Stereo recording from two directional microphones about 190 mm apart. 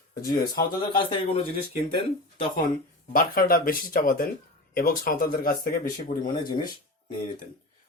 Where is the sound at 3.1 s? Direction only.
50° left (ahead or behind).